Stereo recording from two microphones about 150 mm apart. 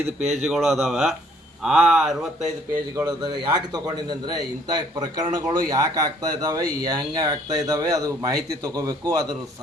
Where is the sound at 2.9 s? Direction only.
25° right (ahead or behind).